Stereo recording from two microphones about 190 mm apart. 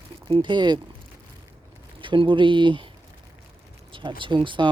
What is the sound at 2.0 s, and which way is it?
Speech, 25° right (ahead or behind).